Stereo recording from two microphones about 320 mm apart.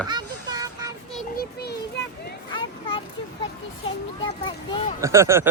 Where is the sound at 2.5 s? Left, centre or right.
Centre.